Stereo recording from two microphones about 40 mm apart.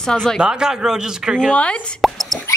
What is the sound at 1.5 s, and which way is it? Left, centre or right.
Speech, left.